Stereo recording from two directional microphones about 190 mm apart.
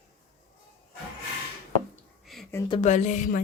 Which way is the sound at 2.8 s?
40° left (ahead or behind).